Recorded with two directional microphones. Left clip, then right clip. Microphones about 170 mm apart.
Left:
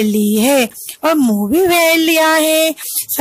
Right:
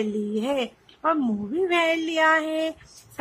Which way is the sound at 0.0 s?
40° left (ahead or behind).